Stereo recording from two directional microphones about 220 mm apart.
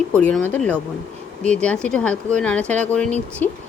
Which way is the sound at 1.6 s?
5° left (ahead or behind).